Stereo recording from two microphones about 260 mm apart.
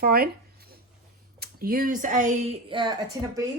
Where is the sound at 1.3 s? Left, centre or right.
Right.